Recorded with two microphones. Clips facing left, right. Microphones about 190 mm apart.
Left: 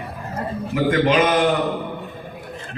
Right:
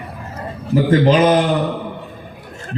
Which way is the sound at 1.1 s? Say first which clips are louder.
Right 6 dB; 35° right (ahead or behind).